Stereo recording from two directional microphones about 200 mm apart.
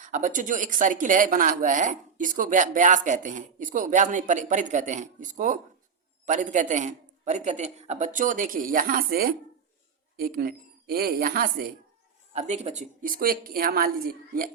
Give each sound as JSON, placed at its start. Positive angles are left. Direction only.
{"t": 0.0, "sound": "a woman's voice", "side_deg": -40}
{"t": 12.3, "sound": "a woman's voice", "side_deg": -35}